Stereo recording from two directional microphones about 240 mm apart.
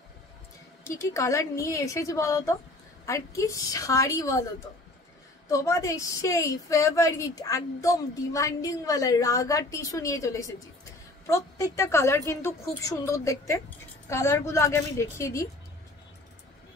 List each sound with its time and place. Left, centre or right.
0.8 s a woman's voice: centre
5.5 s a woman's voice: centre